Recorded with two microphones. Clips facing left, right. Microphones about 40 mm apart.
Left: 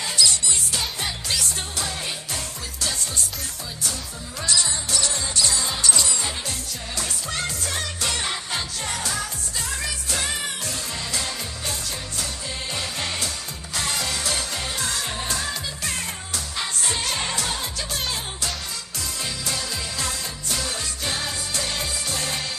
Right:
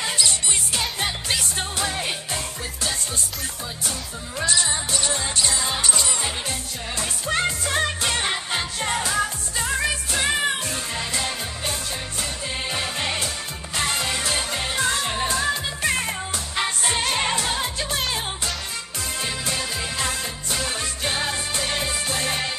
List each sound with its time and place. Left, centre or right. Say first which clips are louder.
0.0 s music: left 1 dB; right
4.4 s music: right 2 dB; right
12.7 s music: right 2 dB; right
19.2 s music: right 2 dB; right